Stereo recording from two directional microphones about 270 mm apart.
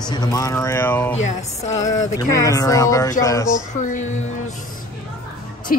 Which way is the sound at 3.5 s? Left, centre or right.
Left.